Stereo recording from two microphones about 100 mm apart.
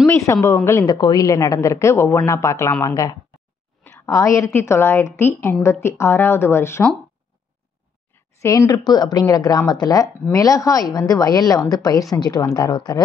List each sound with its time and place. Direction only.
0.0 s a woman's voice: 25° left (ahead or behind)
0.8 s speech: 45° left (ahead or behind)
3.8 s a woman's voice: 30° left (ahead or behind)
8.4 s speech: 30° left (ahead or behind)
8.7 s speech: 45° left (ahead or behind)